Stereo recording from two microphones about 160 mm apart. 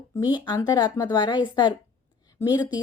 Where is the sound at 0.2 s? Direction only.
30° left (ahead or behind).